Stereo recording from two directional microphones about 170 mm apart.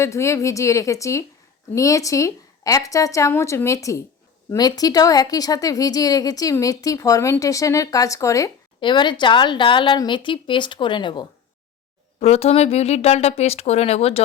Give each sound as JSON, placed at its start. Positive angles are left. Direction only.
{"t": 0.0, "sound": "speech", "side_deg": 15}
{"t": 12.2, "sound": "speech", "side_deg": 40}